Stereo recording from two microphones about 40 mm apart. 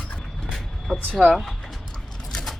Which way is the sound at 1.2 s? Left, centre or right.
Right.